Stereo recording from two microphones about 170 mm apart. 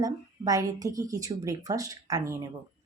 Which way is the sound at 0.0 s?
20° right (ahead or behind).